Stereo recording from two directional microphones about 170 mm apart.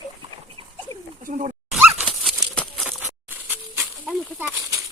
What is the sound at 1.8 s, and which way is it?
Dog, 5° right (ahead or behind).